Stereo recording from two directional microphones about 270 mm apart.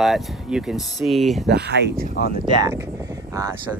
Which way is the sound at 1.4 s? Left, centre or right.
Right.